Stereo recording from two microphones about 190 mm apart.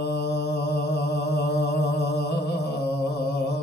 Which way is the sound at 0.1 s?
60° left (ahead or behind).